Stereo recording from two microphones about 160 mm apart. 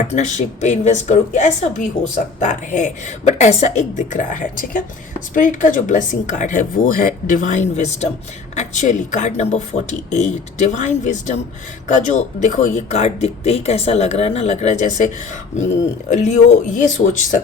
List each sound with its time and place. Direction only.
0.1 s a woman's voice: 45° left (ahead or behind)